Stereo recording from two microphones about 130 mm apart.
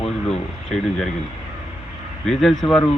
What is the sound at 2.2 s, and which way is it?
Speech, centre (ahead or behind).